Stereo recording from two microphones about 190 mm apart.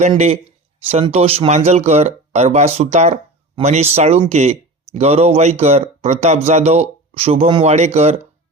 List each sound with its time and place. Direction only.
0.9 s speech: 30° right (ahead or behind)